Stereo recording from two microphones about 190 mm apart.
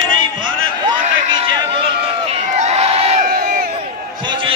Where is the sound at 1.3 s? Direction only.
25° right (ahead or behind).